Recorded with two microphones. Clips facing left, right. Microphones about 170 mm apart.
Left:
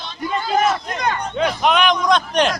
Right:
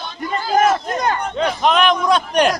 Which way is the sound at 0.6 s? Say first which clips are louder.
Right 3 dB; 45° right (ahead or behind).